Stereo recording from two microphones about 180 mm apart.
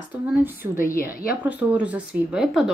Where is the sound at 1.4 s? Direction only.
10° right (ahead or behind).